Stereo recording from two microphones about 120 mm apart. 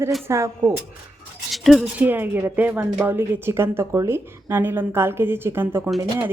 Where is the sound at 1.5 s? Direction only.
Centre (ahead or behind).